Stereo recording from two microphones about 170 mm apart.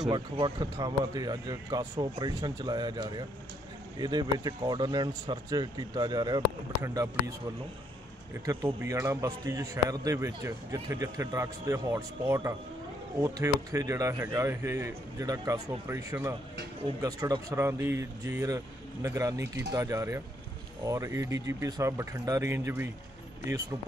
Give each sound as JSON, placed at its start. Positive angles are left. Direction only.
{"t": 0.1, "sound": "a man's voice", "side_deg": -25}
{"t": 8.5, "sound": "a man's voice", "side_deg": -15}